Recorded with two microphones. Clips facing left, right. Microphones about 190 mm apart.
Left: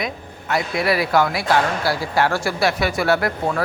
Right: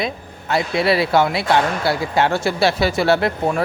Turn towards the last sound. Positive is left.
turn(degrees=-25)  # may be behind; listen again after turning